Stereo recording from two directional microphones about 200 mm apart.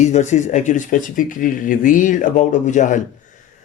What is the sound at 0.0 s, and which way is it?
Speech, 35° left (ahead or behind).